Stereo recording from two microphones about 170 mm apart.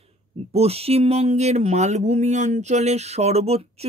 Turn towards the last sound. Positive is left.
turn(degrees=-35)  # may be behind; listen again after turning